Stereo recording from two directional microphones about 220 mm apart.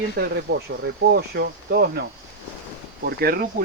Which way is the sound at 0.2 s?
45° right (ahead or behind).